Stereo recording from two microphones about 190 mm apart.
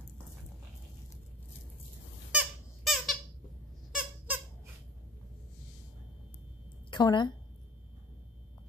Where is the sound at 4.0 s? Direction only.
10° right (ahead or behind).